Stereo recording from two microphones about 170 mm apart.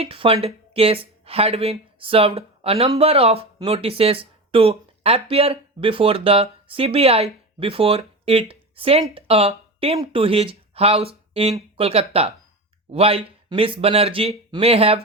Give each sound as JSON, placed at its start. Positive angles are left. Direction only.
{"t": 0.0, "sound": "speech", "side_deg": -35}